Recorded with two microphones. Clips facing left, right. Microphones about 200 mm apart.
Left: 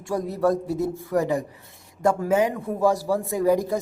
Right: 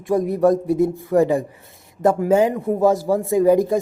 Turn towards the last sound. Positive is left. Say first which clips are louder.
# right 6 dB
turn(degrees=-20)  # may be behind; listen again after turning